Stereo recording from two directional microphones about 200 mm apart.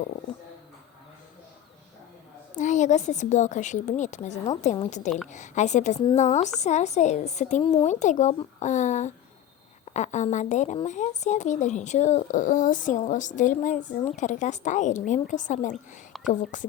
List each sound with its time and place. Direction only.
2.6 s a woman's voice: 40° left (ahead or behind)